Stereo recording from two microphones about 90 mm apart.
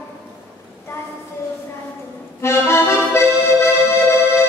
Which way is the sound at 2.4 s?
30° left (ahead or behind).